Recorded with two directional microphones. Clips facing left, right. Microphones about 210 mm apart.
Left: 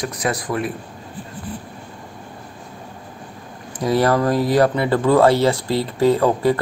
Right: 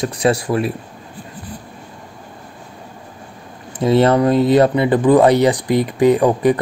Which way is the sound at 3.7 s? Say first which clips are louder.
Right 4 dB; 25° right (ahead or behind).